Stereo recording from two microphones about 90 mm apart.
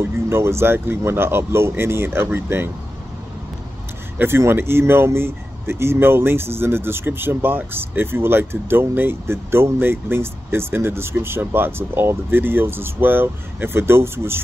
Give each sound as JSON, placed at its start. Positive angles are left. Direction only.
{"t": 0.0, "sound": "speech", "side_deg": -30}
{"t": 4.2, "sound": "speech", "side_deg": -25}